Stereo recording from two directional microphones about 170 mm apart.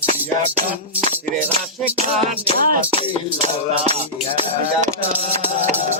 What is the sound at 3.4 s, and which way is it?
Music, 35° right (ahead or behind).